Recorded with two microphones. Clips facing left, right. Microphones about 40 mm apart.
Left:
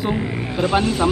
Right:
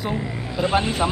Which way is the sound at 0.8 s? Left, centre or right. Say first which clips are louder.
Left 3 dB; centre.